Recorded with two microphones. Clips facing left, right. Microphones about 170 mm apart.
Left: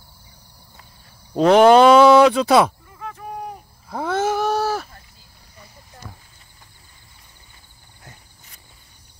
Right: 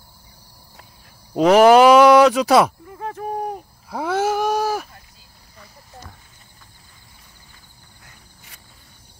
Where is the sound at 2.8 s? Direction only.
55° right (ahead or behind).